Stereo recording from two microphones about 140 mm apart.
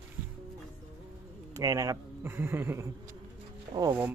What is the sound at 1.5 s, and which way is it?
A man's voice, 20° right (ahead or behind).